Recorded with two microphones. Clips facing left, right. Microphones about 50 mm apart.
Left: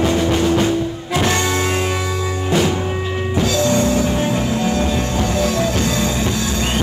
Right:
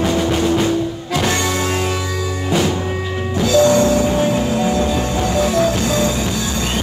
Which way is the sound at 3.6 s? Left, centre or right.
Right.